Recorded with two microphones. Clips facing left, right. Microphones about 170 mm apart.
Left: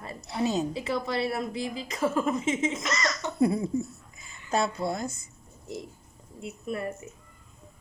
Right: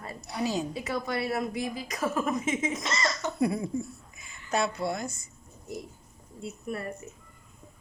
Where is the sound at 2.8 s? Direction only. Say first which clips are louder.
Left 1 dB; 25° right (ahead or behind).